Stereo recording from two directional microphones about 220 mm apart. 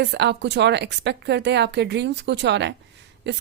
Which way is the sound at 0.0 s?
50° right (ahead or behind).